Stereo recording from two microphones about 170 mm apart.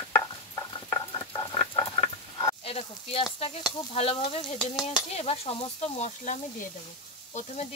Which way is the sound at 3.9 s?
35° left (ahead or behind).